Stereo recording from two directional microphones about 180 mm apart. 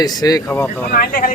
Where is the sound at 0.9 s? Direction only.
55° left (ahead or behind).